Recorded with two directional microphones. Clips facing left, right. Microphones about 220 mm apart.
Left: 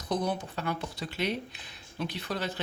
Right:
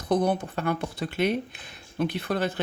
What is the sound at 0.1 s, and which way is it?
Speech, 55° right (ahead or behind).